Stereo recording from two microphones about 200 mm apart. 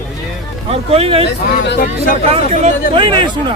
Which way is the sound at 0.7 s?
30° right (ahead or behind).